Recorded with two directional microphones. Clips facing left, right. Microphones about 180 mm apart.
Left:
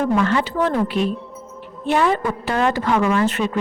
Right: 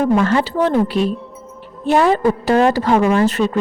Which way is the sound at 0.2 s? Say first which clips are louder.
Right 3 dB; 35° right (ahead or behind).